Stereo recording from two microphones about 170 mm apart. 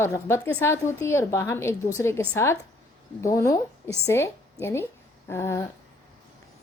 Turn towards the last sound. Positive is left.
turn(degrees=15)  # may be behind; listen again after turning